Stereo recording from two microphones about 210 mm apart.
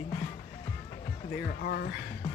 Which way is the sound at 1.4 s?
45° left (ahead or behind).